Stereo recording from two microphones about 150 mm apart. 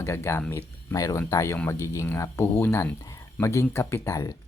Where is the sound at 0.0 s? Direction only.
15° left (ahead or behind).